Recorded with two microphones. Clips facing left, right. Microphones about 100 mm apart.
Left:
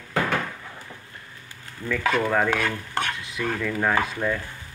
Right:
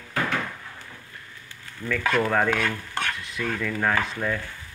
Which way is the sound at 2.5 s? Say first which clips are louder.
Left 1 dB; 10° left (ahead or behind).